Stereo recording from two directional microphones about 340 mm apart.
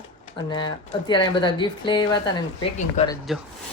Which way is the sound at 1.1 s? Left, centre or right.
Centre.